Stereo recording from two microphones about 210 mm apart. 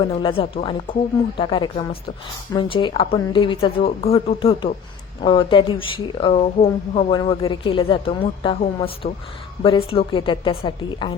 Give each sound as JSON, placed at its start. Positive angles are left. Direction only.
{"t": 0.0, "sound": "speech", "side_deg": 20}